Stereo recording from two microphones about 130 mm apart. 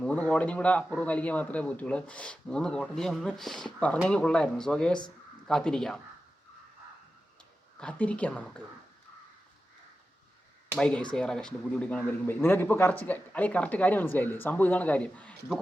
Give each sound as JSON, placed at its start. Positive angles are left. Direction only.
{"t": 0.0, "sound": "speech", "side_deg": 10}
{"t": 7.8, "sound": "speech", "side_deg": 10}
{"t": 10.8, "sound": "speech", "side_deg": 5}